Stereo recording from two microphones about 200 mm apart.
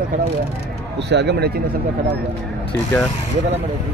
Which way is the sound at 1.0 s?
60° right (ahead or behind).